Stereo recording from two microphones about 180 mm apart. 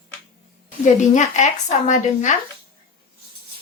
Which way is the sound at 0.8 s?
40° left (ahead or behind).